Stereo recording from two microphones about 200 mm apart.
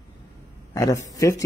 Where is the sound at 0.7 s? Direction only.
15° left (ahead or behind).